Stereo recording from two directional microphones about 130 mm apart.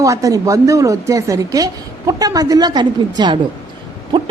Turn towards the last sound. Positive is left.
turn(degrees=-35)  # may be behind; listen again after turning